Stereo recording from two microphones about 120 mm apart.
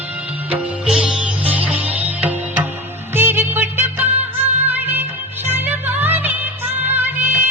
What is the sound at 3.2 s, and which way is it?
Music of bollywood, 15° right (ahead or behind).